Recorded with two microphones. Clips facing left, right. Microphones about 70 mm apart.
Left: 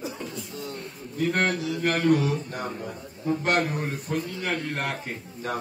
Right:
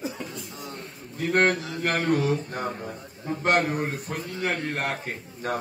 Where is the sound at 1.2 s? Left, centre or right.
Right.